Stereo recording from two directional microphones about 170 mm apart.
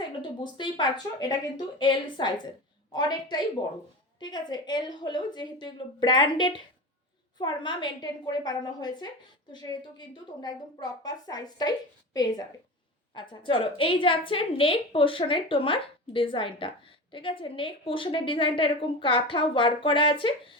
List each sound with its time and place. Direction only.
0.2 s a woman's voice: 25° left (ahead or behind)